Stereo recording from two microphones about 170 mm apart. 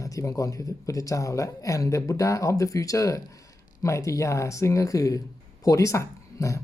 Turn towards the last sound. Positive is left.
turn(degrees=20)  # may be behind; listen again after turning